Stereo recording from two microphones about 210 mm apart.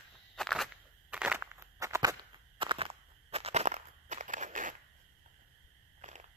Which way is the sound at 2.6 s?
25° right (ahead or behind).